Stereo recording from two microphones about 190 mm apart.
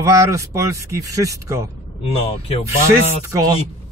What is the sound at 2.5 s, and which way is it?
Speech, 30° left (ahead or behind).